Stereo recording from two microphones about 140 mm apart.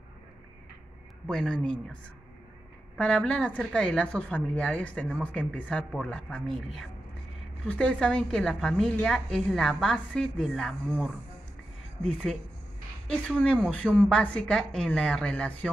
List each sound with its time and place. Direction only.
1.3 s a woman's voice: 5° left (ahead or behind)
3.0 s a woman's voice: 5° left (ahead or behind)
12.0 s a woman's voice: 5° left (ahead or behind)